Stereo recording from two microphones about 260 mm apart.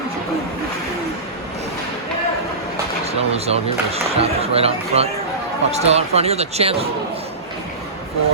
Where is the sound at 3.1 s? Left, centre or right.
Right.